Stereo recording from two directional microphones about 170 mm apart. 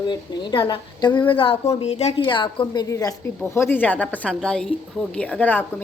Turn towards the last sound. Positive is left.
turn(degrees=10)  # may be behind; listen again after turning